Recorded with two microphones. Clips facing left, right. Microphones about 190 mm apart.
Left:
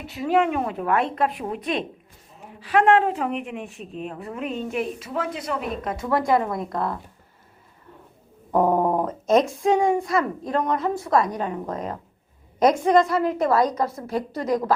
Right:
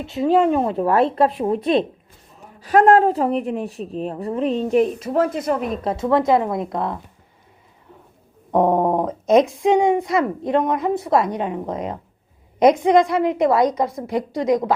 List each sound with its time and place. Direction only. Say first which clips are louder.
0.0 s speech: right 5 dB; 25° right (ahead or behind); by 5.6 s 45° right (ahead or behind)
5.7 s speech: right 4 dB; 30° right (ahead or behind)
8.6 s speech: right 3 dB; 20° right (ahead or behind)
9.0 s speech: right 4 dB; centre (ahead or behind)
9.6 s a woman's voice: right 3 dB; 20° right (ahead or behind)